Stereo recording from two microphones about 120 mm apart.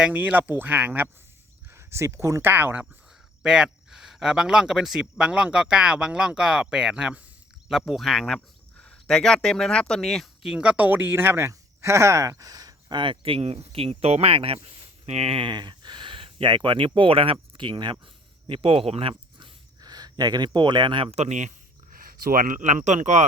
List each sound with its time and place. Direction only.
0.0 s speech: 10° right (ahead or behind)
3.4 s speech: 5° right (ahead or behind); by 17.9 s 40° right (ahead or behind)
18.0 s a sound: 45° right (ahead or behind)
19.8 s speech: 35° right (ahead or behind); by 21.5 s 80° right
22.4 s speech: 90° right